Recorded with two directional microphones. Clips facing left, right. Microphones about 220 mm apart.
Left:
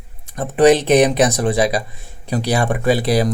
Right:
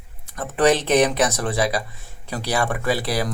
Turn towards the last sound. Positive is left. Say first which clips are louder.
# left 7 dB
turn(degrees=20)  # may be behind; listen again after turning